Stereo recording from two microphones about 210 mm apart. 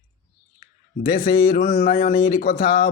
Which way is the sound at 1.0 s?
40° left (ahead or behind).